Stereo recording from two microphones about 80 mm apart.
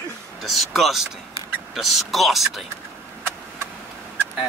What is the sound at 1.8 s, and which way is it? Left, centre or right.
Speech, centre.